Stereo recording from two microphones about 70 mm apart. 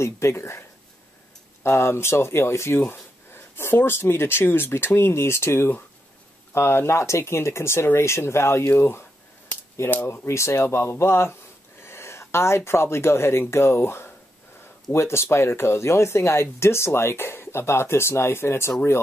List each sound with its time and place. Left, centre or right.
0.0 s speech: left